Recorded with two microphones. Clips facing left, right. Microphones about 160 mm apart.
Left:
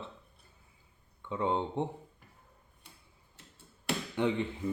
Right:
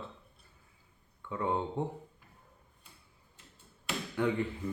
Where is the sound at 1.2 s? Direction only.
20° left (ahead or behind).